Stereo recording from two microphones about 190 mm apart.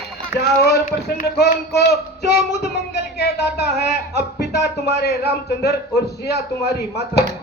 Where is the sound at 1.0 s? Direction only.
60° left (ahead or behind).